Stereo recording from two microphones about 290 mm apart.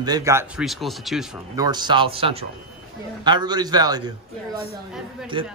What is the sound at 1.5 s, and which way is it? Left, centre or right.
A man's voice, centre.